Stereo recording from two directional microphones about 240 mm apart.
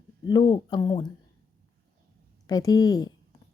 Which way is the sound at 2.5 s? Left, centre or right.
Centre.